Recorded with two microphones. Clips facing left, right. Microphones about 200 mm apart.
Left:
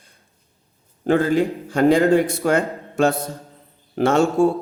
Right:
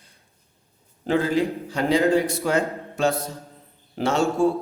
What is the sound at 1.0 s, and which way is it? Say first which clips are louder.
A man's voice: left 4 dB; 50° left (ahead or behind).